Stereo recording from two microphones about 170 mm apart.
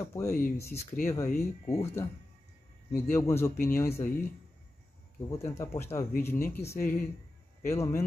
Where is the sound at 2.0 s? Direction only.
15° left (ahead or behind).